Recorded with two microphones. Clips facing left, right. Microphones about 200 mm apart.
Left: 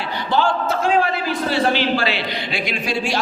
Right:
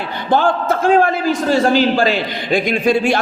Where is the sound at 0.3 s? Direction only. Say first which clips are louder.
Right 4 dB; 50° right (ahead or behind).